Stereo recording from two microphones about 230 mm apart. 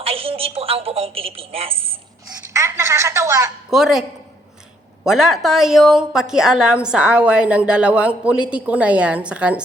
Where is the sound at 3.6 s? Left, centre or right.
Centre.